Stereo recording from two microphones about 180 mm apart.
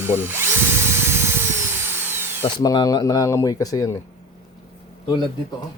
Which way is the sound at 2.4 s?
25° left (ahead or behind).